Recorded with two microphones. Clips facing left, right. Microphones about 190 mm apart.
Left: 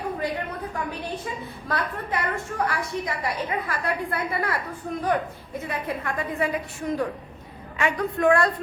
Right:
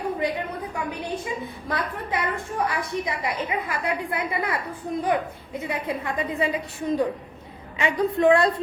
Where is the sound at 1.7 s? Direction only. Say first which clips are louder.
Even; 20° right (ahead or behind).